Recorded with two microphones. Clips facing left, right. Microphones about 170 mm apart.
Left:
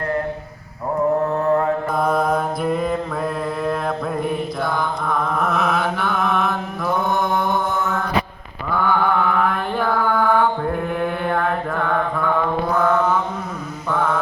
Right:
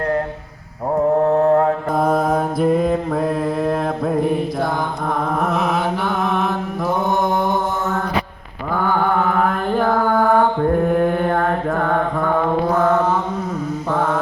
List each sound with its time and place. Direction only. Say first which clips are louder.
1.3 s mantra: right 4 dB; 55° right (ahead or behind)
2.0 s mantra: right 2 dB; 45° right (ahead or behind)
4.2 s mantra: right 4 dB; 40° right (ahead or behind)
6.4 s mantra: right 2 dB; 40° right (ahead or behind)